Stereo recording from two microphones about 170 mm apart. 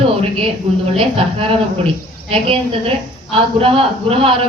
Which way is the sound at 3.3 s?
35° right (ahead or behind).